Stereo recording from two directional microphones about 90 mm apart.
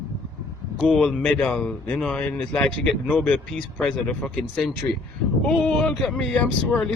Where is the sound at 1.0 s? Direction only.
15° left (ahead or behind).